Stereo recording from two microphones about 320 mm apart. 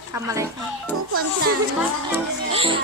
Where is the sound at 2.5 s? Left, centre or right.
Centre.